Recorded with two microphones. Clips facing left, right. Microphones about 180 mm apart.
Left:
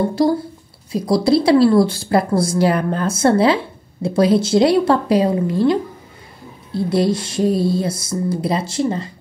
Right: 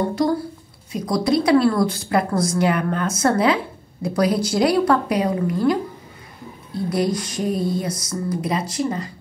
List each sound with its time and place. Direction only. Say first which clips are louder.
0.1 s a woman's voice: left 4 dB; 30° left (ahead or behind)